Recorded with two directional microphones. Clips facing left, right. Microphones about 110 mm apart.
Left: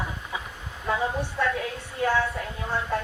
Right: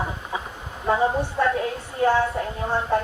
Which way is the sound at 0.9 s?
35° right (ahead or behind).